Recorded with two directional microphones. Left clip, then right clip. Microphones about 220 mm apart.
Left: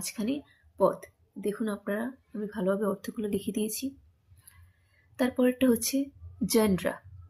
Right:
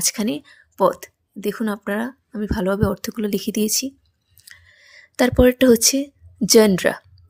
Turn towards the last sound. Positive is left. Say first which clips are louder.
# right 12 dB
turn(degrees=-40)  # may be behind; listen again after turning